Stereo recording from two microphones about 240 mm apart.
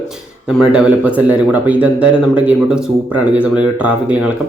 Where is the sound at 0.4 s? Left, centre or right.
Centre.